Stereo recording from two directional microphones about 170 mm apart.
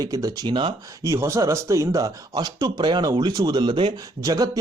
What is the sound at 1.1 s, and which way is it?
Speech, 15° right (ahead or behind).